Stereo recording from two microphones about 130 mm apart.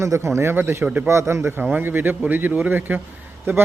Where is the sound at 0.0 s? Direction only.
20° right (ahead or behind).